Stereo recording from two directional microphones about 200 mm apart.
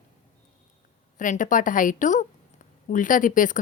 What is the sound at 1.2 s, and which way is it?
Speech, 40° left (ahead or behind).